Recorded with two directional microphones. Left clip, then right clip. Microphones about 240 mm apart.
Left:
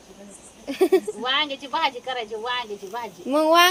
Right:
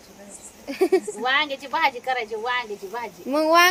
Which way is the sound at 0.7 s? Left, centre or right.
Centre.